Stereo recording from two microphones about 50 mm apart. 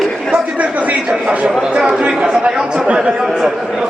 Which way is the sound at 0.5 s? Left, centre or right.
Right.